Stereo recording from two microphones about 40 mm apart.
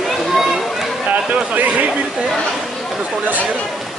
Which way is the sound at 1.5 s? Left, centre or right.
Right.